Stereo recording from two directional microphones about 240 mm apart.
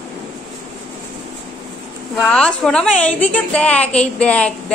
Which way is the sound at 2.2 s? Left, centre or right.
Centre.